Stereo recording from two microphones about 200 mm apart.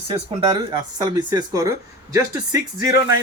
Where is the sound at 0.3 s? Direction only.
25° right (ahead or behind).